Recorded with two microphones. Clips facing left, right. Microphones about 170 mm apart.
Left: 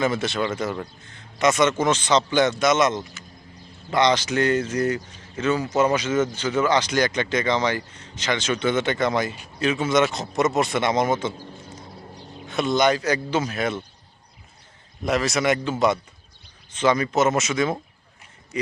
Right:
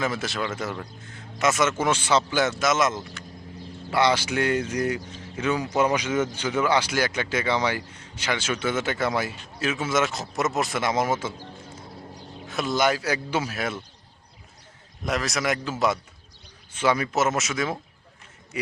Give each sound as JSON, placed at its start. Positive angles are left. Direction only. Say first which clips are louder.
{"t": 0.0, "sound": "speech", "louder": "left 4 dB", "side_deg": 0}
{"t": 15.0, "sound": "a man's voice", "louder": "left 5 dB", "side_deg": 0}